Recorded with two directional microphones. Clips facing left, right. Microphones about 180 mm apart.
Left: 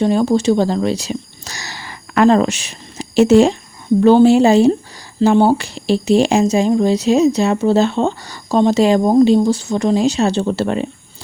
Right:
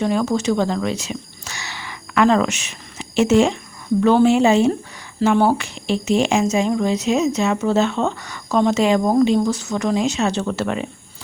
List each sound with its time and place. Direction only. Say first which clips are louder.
0.0 s speech: left 5 dB; 30° left (ahead or behind)